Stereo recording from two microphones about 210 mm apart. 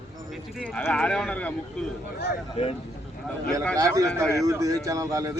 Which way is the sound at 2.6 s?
30° left (ahead or behind).